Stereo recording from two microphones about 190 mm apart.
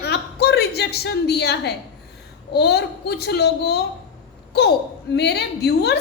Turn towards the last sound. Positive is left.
turn(degrees=60)  # may be behind; listen again after turning